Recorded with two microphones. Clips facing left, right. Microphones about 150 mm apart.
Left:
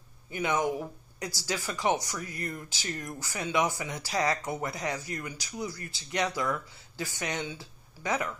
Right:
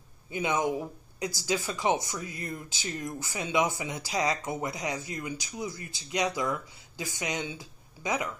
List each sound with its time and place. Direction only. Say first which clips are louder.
0.3 s speech: even; 20° right (ahead or behind)